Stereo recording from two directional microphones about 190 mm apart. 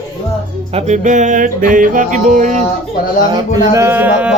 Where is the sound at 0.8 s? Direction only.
40° right (ahead or behind).